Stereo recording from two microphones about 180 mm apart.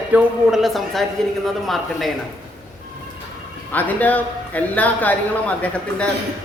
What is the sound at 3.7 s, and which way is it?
A woman's voice, 10° left (ahead or behind).